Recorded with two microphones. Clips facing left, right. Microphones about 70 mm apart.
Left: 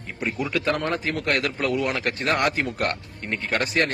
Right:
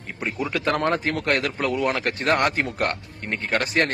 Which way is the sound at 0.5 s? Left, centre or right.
Right.